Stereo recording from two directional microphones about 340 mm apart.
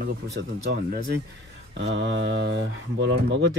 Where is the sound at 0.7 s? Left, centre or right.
Right.